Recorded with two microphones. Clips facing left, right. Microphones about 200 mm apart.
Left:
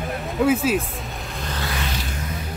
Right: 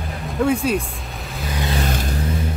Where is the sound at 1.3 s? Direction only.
10° right (ahead or behind).